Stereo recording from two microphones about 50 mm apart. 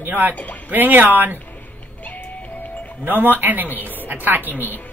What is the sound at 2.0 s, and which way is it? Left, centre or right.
Music, left.